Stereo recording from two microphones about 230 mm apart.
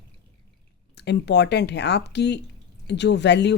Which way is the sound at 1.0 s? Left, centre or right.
Left.